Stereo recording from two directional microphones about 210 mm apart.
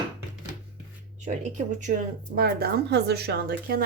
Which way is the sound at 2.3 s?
50° right (ahead or behind).